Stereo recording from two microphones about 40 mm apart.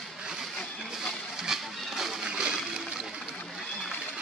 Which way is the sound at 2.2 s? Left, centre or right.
Right.